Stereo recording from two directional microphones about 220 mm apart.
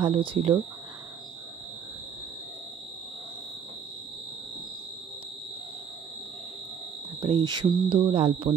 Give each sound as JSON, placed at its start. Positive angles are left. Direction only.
{"t": 0.0, "sound": "speech", "side_deg": -25}
{"t": 7.2, "sound": "speech", "side_deg": -20}